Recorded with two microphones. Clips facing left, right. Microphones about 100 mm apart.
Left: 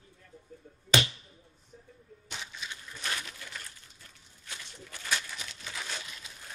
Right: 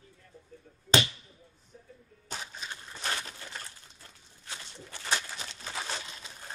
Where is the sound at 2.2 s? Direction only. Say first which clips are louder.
Right 2 dB; 40° right (ahead or behind).